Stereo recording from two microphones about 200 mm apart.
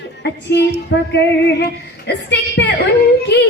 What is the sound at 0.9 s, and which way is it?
Speech, 60° left (ahead or behind).